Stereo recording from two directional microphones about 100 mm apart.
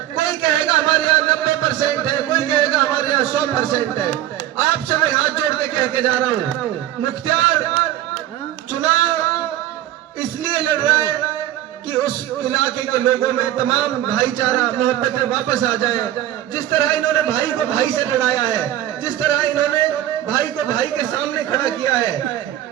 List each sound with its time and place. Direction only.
0.2 s a sound: 45° left (ahead or behind)
4.9 s a man's voice: 45° left (ahead or behind)
8.7 s female singing: 45° left (ahead or behind)
10.2 s a man's voice: 50° left (ahead or behind)
15.1 s a man's voice: 35° left (ahead or behind)